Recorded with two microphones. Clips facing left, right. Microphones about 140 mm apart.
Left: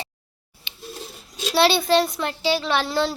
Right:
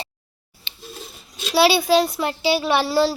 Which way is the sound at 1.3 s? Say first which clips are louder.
Right 2 dB; 5° right (ahead or behind).